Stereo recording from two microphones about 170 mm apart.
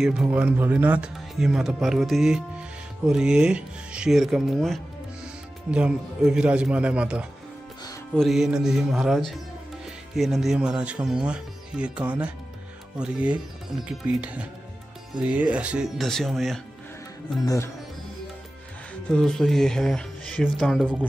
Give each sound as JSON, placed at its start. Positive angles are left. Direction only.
{"t": 0.0, "sound": "speech", "side_deg": -5}
{"t": 17.4, "sound": "speech", "side_deg": 20}
{"t": 19.0, "sound": "speech", "side_deg": 5}